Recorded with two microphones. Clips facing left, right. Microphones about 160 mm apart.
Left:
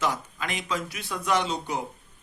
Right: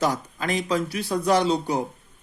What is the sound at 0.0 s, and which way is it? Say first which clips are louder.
Speech: right 4 dB; 40° right (ahead or behind).